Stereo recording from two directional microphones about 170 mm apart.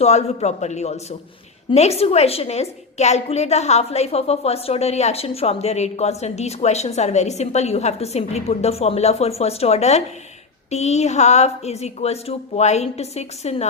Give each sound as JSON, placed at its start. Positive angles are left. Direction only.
{"t": 0.0, "sound": "a woman's voice", "side_deg": 40}